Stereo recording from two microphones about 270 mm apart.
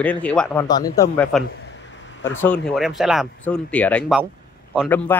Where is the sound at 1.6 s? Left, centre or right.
Left.